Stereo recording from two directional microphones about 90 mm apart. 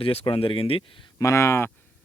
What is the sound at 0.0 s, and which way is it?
Speech, 90° left.